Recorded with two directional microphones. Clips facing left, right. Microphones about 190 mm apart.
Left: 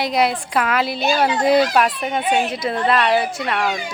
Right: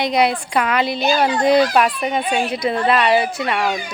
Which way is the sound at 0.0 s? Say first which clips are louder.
Right 2 dB; centre (ahead or behind).